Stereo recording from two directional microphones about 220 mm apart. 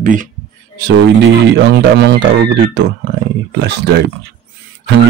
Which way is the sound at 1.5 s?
50° right (ahead or behind).